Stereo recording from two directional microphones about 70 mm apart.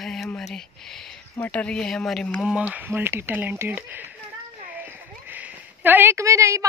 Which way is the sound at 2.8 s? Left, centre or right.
Right.